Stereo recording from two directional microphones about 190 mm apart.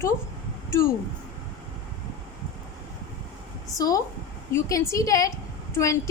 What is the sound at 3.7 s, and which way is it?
A woman's voice, 20° left (ahead or behind).